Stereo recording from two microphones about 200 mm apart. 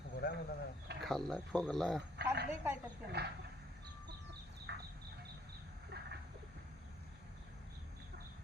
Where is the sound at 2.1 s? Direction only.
55° right (ahead or behind).